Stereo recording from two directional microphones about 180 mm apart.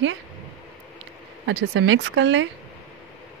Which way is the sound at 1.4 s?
90° right.